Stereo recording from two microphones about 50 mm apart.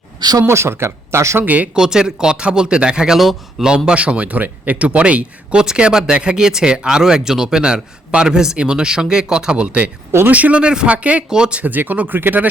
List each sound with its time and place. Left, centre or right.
0.4 s speech: right
1.4 s speech: right
1.7 s speech: centre
3.8 s speech: right
10.6 s speech: centre
11.6 s speech: right